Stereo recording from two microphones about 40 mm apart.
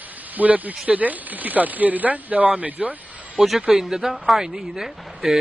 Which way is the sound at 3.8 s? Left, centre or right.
Centre.